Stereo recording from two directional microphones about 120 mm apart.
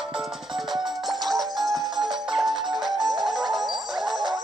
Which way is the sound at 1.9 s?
40° right (ahead or behind).